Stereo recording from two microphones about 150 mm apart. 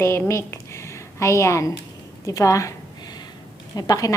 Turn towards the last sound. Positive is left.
turn(degrees=25)  # may be behind; listen again after turning